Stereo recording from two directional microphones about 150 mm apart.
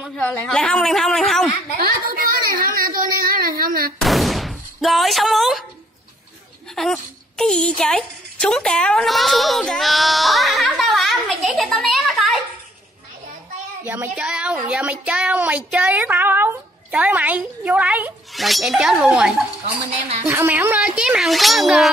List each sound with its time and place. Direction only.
0.1 s speech: 5° left (ahead or behind)
2.6 s speech: 75° right (ahead or behind)
4.0 s speech: centre (ahead or behind)
6.7 s a woman's voice: centre (ahead or behind)
13.8 s speech: 15° right (ahead or behind)
20.2 s speech: 15° right (ahead or behind)